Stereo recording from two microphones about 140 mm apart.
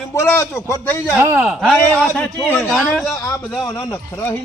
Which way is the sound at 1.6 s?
5° left (ahead or behind).